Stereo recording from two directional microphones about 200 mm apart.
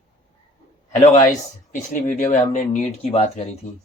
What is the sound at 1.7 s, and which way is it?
Speech, 40° left (ahead or behind).